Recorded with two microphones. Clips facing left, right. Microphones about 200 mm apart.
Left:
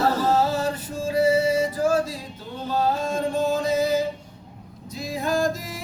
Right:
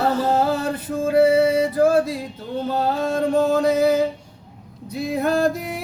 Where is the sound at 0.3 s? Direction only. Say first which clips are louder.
Right 2 dB; 55° right (ahead or behind).